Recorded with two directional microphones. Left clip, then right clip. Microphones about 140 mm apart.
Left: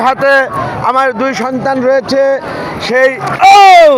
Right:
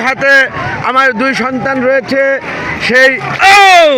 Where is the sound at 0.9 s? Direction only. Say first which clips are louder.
Right 2 dB; 40° right (ahead or behind).